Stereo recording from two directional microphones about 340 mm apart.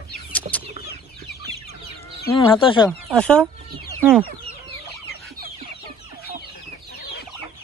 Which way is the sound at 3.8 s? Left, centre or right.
Centre.